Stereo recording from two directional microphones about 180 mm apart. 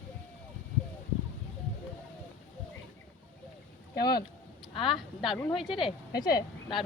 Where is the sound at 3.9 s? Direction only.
60° left (ahead or behind).